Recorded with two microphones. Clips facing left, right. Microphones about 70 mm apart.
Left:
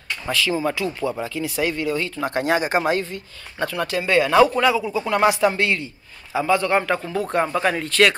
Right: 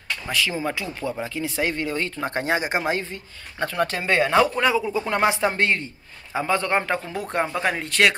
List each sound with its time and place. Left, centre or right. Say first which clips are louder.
0.3 s speech: left 4 dB; right
5.5 s speech: left 1 dB; right